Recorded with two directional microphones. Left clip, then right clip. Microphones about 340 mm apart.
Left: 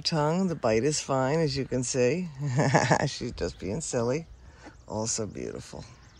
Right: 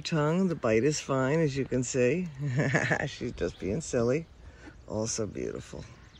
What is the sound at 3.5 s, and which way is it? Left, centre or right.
Speech, left.